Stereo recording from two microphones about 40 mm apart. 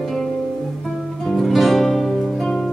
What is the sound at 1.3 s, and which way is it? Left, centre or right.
Music, centre.